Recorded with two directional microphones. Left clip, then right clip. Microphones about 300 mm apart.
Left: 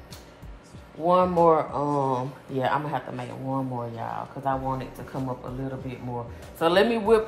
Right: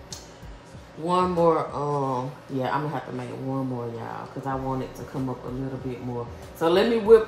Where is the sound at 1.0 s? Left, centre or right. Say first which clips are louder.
Left 2 dB; left.